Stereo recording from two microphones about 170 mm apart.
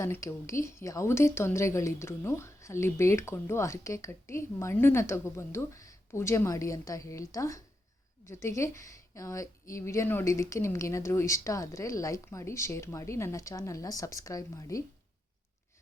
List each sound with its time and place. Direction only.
0.0 s a woman's voice: 15° left (ahead or behind)